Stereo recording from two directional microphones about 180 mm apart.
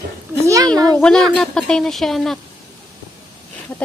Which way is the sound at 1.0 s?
5° left (ahead or behind).